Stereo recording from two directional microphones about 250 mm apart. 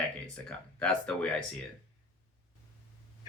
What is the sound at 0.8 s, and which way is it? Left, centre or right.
Speech, centre.